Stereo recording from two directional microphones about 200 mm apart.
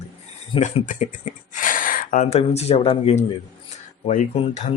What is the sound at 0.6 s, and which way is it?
Speech, 40° left (ahead or behind).